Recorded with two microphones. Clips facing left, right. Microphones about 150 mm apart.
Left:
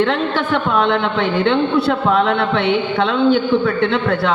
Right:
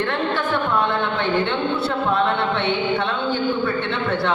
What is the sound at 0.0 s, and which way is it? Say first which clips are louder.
A woman's voice: left 5 dB; 90° left.